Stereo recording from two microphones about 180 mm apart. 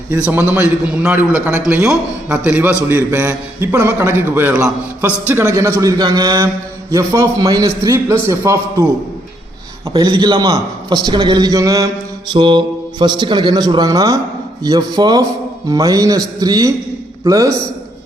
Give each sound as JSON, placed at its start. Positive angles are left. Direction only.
{"t": 0.3, "sound": "a man's voice", "side_deg": -10}
{"t": 9.9, "sound": "a man's voice", "side_deg": -25}